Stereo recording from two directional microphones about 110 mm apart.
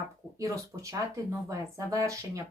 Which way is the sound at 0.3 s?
30° right (ahead or behind).